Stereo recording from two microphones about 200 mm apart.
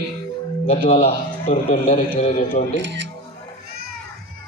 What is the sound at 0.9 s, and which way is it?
A man's voice, 30° left (ahead or behind).